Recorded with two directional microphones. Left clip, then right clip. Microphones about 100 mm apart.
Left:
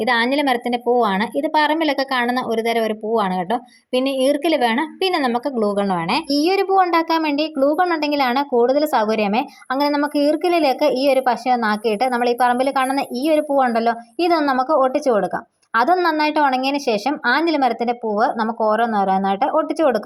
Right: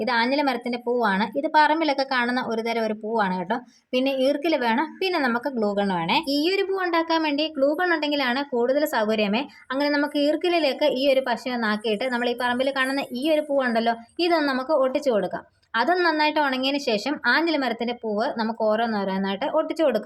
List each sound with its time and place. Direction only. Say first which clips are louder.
0.0 s a woman's voice: left 4 dB; 50° left (ahead or behind); by 20.0 s 30° left (ahead or behind)